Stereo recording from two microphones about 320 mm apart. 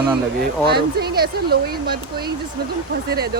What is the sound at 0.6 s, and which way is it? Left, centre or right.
Speech, right.